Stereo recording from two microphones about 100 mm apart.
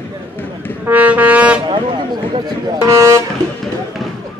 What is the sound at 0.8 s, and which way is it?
Speech, 15° right (ahead or behind).